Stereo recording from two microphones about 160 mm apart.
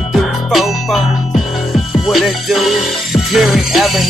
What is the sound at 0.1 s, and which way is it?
Music, centre (ahead or behind).